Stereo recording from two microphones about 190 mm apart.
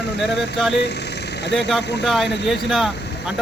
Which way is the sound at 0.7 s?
65° left (ahead or behind).